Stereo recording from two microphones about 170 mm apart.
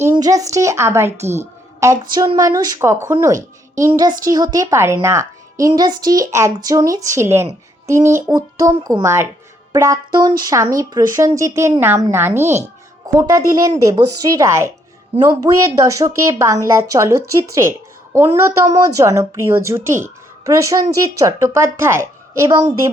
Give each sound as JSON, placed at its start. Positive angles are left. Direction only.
{"t": 0.1, "sound": "a woman's voice", "side_deg": -20}